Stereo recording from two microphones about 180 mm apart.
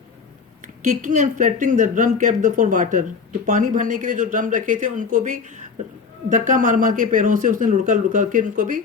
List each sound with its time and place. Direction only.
1.0 s speech: 45° right (ahead or behind)